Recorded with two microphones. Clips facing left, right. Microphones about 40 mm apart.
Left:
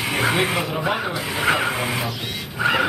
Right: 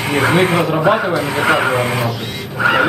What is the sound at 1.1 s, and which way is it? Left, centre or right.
Speech, centre.